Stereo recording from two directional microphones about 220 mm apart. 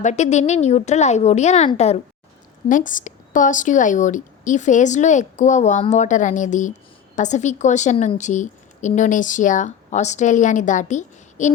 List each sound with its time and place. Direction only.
0.0 s a woman's voice: 30° left (ahead or behind)